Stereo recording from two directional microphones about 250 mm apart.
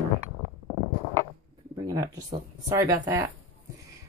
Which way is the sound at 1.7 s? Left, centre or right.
Centre.